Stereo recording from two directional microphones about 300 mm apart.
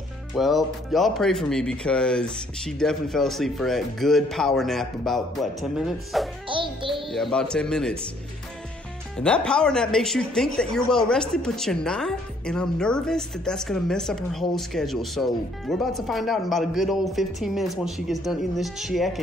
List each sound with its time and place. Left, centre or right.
0.3 s speech: centre
6.5 s music: centre
7.1 s speech: centre
9.2 s speech: centre